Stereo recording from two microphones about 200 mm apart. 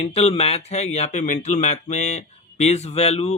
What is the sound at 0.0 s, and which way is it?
Speech, 30° left (ahead or behind).